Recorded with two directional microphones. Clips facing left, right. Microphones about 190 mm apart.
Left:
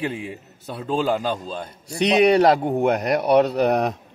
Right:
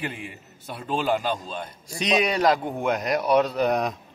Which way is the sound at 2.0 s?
65° left (ahead or behind).